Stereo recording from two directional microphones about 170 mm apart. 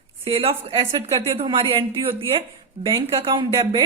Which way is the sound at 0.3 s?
35° right (ahead or behind).